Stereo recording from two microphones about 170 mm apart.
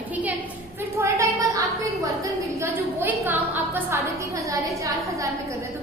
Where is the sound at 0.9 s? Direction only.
20° right (ahead or behind).